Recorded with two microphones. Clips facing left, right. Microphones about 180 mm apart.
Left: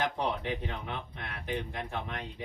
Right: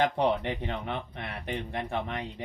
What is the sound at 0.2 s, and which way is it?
Speech, 65° right (ahead or behind).